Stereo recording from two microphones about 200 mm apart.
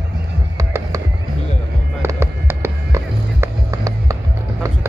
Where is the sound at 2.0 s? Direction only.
10° right (ahead or behind).